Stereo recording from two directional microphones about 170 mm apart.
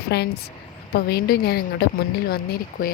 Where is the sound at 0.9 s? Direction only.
65° left (ahead or behind).